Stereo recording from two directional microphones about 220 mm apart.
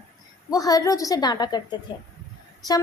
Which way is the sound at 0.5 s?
15° left (ahead or behind).